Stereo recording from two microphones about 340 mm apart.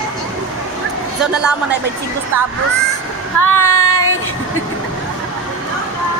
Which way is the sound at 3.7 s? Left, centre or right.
Left.